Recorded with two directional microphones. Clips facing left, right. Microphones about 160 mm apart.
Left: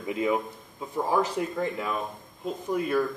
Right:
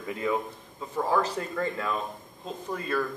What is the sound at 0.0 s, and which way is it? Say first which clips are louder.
Speech: left 2 dB; 15° left (ahead or behind).